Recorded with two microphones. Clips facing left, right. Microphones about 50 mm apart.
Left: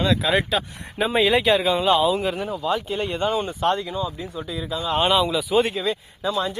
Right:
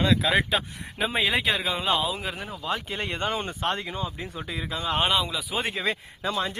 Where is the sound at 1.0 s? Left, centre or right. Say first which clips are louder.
Left 6 dB; centre.